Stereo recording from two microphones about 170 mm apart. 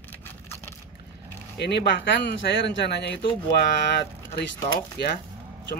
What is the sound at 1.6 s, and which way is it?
Speech, 75° left (ahead or behind).